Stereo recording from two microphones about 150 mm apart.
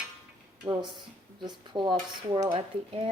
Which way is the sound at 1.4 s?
30° right (ahead or behind).